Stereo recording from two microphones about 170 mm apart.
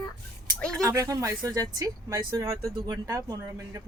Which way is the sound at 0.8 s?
20° right (ahead or behind).